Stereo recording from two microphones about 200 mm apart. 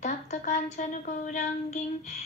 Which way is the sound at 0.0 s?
35° left (ahead or behind).